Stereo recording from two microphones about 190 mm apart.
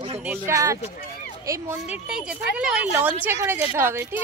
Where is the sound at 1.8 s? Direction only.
5° right (ahead or behind).